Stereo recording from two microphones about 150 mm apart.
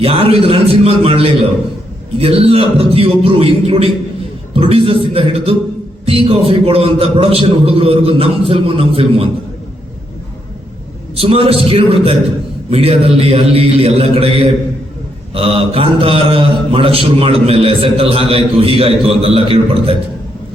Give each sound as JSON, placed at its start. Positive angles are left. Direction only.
{"t": 0.0, "sound": "a man's voice", "side_deg": -40}
{"t": 11.2, "sound": "a man's voice", "side_deg": -40}